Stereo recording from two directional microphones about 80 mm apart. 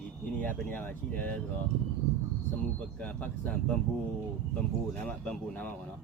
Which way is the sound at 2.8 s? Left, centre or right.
Centre.